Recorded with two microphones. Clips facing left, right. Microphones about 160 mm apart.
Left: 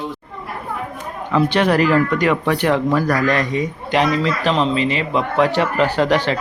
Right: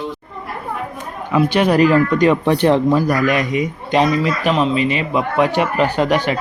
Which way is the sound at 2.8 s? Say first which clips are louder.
Right 2 dB; 15° right (ahead or behind).